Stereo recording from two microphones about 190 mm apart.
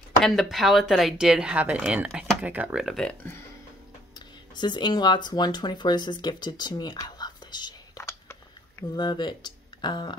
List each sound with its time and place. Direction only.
0.2 s speech: centre (ahead or behind)
4.6 s speech: 25° left (ahead or behind)